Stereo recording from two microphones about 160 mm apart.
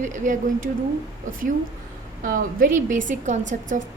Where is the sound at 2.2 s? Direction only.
60° right (ahead or behind).